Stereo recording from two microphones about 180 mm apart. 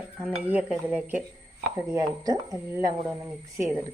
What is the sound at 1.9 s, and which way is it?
Speech, 20° right (ahead or behind).